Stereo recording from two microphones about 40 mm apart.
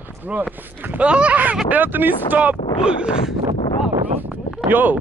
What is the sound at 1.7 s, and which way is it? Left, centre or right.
Speech, right.